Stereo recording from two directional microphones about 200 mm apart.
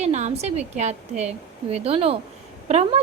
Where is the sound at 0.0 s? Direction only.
35° right (ahead or behind).